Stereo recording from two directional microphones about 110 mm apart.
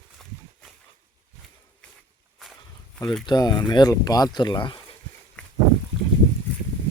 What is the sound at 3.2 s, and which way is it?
Speech, 40° left (ahead or behind).